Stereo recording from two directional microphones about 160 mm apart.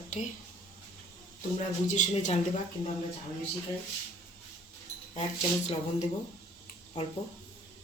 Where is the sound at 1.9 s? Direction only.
45° left (ahead or behind).